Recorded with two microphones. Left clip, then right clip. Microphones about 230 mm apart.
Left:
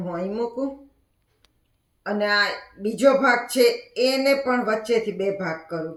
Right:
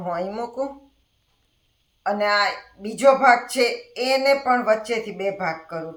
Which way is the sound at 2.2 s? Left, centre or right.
Right.